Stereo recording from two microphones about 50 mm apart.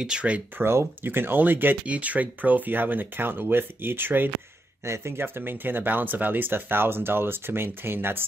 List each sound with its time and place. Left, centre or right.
0.0 s speech: right
0.6 s speech: right
1.9 s speech: right
4.8 s speech: right